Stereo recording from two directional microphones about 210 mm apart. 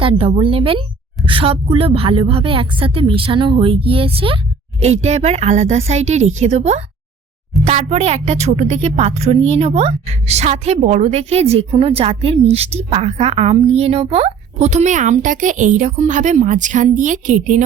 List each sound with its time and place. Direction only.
0.0 s a woman's voice: 25° right (ahead or behind)